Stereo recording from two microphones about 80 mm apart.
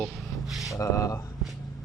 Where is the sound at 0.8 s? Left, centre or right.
Left.